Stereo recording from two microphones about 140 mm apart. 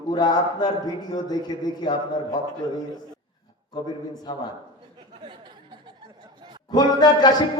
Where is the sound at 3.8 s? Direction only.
35° left (ahead or behind).